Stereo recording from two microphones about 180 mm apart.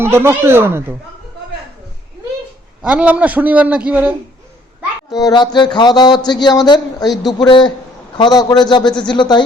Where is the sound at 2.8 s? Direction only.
5° right (ahead or behind).